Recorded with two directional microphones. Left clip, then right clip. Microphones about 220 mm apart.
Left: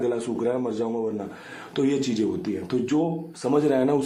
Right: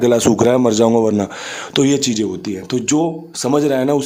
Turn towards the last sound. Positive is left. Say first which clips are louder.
# right 6 dB
turn(degrees=-30)  # may be behind; listen again after turning